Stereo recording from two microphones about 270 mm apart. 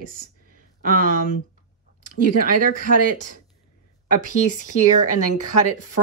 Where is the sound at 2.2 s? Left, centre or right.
Right.